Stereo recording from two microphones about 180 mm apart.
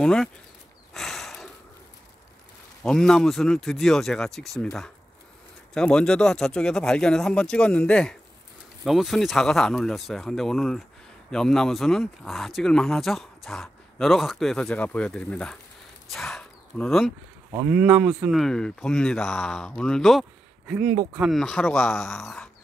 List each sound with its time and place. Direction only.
0.0 s speech: 5° left (ahead or behind)
0.9 s a sound: centre (ahead or behind)
2.8 s speech: 5° left (ahead or behind)